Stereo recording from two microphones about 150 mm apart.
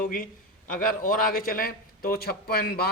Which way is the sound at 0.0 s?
65° left (ahead or behind).